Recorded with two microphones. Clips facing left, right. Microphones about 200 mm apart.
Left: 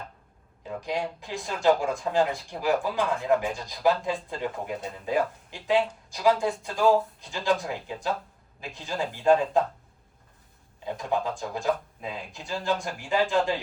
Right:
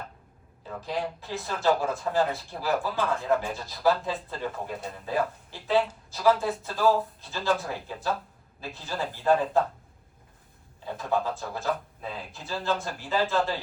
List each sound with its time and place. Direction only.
0.6 s speech: 15° left (ahead or behind)
10.8 s speech: 15° left (ahead or behind)